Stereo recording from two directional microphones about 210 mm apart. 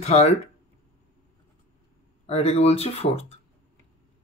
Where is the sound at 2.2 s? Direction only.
30° left (ahead or behind).